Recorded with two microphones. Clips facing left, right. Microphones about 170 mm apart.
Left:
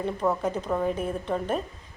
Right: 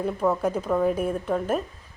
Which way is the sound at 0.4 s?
10° right (ahead or behind).